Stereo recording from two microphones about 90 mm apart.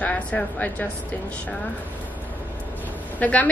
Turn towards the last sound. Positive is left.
turn(degrees=15)  # may be behind; listen again after turning